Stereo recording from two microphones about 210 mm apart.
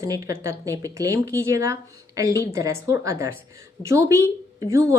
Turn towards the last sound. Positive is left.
turn(degrees=-15)  # may be behind; listen again after turning